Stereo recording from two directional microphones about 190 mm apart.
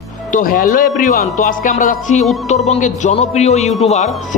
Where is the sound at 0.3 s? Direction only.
45° left (ahead or behind).